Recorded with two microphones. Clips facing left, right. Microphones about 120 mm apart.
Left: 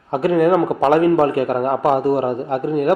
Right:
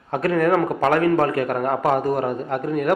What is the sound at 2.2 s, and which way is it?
Speech, 30° left (ahead or behind).